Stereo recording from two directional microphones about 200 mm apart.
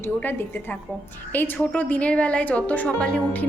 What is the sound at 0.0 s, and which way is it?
A woman's voice, 10° left (ahead or behind).